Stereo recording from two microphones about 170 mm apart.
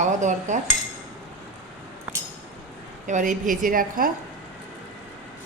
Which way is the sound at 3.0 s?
50° right (ahead or behind).